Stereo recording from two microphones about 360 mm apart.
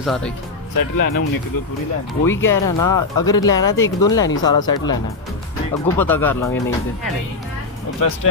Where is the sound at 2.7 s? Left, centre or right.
Left.